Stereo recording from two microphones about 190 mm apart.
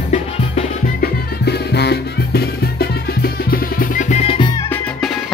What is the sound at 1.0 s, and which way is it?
Music, 60° left (ahead or behind).